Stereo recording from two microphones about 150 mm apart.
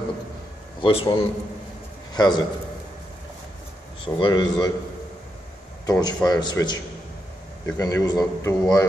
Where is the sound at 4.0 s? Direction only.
30° left (ahead or behind).